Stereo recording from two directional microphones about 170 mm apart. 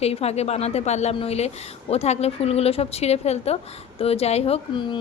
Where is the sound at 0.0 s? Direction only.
35° left (ahead or behind).